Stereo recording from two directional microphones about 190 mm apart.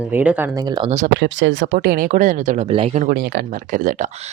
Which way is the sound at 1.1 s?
70° right (ahead or behind).